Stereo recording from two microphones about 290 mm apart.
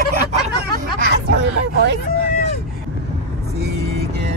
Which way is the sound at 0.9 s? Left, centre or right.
Right.